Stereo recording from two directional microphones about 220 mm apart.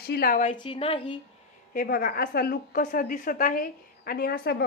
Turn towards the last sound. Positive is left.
turn(degrees=45)  # may be behind; listen again after turning